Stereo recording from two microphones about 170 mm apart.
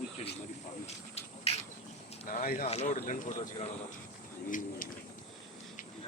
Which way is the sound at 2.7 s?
40° left (ahead or behind).